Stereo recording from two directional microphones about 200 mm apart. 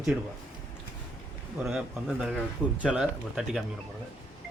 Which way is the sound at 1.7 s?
Centre (ahead or behind).